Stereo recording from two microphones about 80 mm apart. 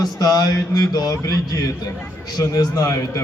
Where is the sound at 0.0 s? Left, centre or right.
Left.